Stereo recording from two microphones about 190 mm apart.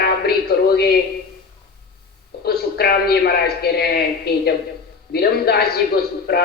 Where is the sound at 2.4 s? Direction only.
55° left (ahead or behind).